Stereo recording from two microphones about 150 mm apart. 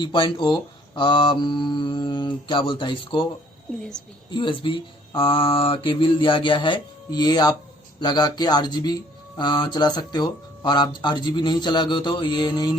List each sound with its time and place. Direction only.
0.0 s speech: 35° left (ahead or behind)
4.3 s speech: 35° left (ahead or behind)